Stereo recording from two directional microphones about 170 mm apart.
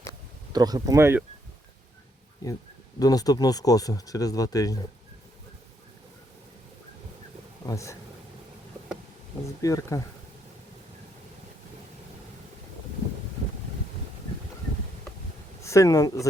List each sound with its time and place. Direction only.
0.5 s speech: 25° right (ahead or behind)
3.0 s speech: 20° left (ahead or behind)
7.7 s speech: 20° left (ahead or behind)
9.6 s speech: 20° left (ahead or behind)
15.6 s speech: 20° left (ahead or behind)